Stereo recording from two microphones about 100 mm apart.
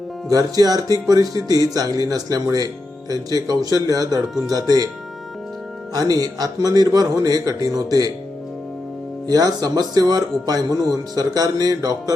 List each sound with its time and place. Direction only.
0.3 s speech: 40° right (ahead or behind)
5.9 s speech: 40° right (ahead or behind)
9.2 s speech: 40° right (ahead or behind)